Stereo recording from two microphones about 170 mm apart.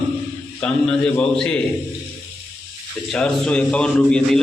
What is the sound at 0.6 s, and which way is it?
A man's voice, 5° left (ahead or behind).